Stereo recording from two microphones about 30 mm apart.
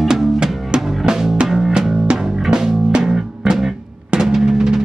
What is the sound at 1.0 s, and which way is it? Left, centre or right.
Drum, centre.